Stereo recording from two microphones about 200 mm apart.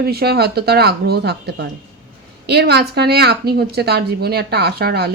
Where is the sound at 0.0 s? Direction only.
50° right (ahead or behind).